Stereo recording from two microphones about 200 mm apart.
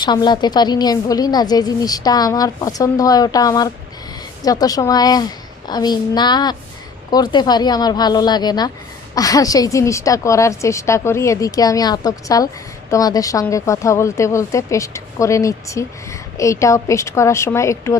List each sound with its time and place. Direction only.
0.0 s a woman's voice: 20° left (ahead or behind)